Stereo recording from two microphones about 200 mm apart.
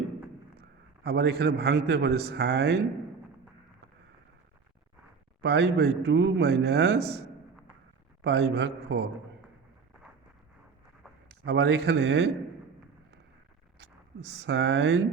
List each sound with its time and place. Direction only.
1.0 s a man's voice: 55° right (ahead or behind)
5.4 s a man's voice: 60° right (ahead or behind)
8.2 s a man's voice: 60° right (ahead or behind)
11.4 s a man's voice: 55° right (ahead or behind)
14.3 s a man's voice: 60° right (ahead or behind)